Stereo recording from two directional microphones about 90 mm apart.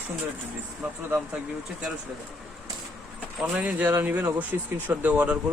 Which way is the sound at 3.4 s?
15° right (ahead or behind).